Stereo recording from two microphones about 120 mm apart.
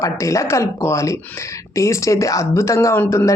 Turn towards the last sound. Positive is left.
turn(degrees=20)  # may be behind; listen again after turning